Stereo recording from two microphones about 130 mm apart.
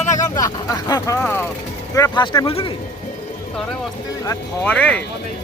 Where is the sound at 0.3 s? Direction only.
25° left (ahead or behind).